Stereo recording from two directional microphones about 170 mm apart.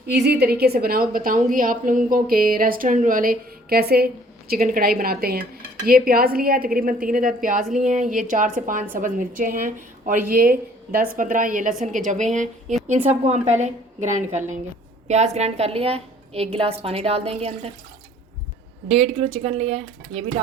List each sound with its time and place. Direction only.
0.1 s a woman's voice: 75° right (ahead or behind); by 17.7 s 35° right (ahead or behind)
18.9 s a woman's voice: 35° right (ahead or behind)